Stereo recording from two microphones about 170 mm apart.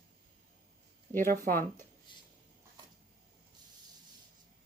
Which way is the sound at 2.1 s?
30° left (ahead or behind).